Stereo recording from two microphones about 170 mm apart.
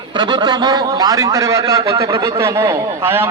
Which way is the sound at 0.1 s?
25° right (ahead or behind).